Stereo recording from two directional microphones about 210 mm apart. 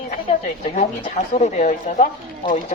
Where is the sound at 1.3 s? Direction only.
35° left (ahead or behind).